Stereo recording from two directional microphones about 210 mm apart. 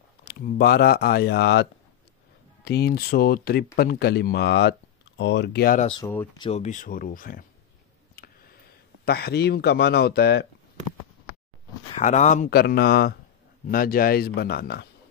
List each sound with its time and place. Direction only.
0.2 s speech: 50° left (ahead or behind)
5.8 s speech: 25° left (ahead or behind)
6.5 s speech: 35° left (ahead or behind)
9.0 s speech: 50° left (ahead or behind)
12.0 s speech: 35° left (ahead or behind); by 14.9 s 50° left (ahead or behind)